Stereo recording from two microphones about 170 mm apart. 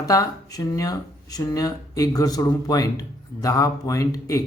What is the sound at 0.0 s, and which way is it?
Speech, 20° left (ahead or behind).